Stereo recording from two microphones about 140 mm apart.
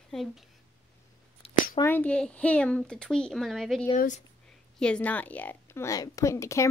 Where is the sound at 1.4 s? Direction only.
45° left (ahead or behind).